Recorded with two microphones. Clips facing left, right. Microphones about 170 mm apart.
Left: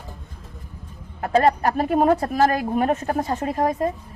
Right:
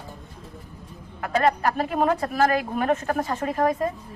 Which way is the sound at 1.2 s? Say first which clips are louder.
Left 3 dB; 35° left (ahead or behind).